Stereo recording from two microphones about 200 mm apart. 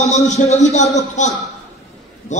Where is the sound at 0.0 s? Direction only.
35° left (ahead or behind).